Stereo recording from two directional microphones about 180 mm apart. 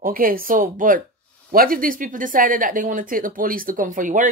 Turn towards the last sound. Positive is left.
turn(degrees=-50)  # may be behind; listen again after turning